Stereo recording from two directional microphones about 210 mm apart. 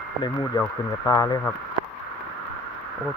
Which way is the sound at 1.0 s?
15° left (ahead or behind).